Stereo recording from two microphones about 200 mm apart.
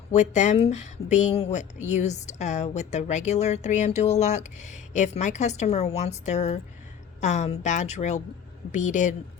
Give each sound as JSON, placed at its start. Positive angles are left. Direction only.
{"t": 0.1, "sound": "speech", "side_deg": 35}